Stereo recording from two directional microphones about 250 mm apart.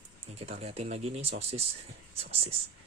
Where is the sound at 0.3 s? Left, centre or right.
Right.